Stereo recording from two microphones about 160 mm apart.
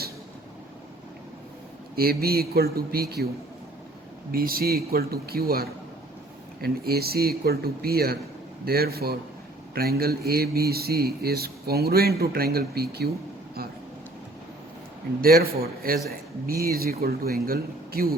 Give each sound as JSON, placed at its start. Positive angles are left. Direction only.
{"t": 2.0, "sound": "a man's voice", "side_deg": -70}
{"t": 4.3, "sound": "a man's voice", "side_deg": -65}
{"t": 15.2, "sound": "a man's voice", "side_deg": -70}